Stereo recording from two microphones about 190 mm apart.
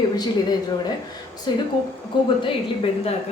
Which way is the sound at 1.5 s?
25° left (ahead or behind).